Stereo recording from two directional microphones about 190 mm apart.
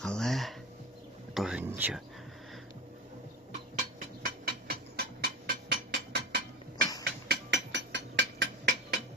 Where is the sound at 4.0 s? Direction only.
50° right (ahead or behind).